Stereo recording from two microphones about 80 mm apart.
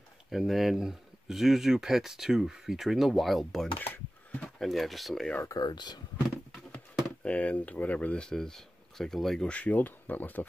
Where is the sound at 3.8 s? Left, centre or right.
Left.